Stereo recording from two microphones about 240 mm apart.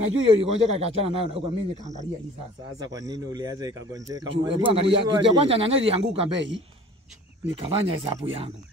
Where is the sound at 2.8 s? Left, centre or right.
Centre.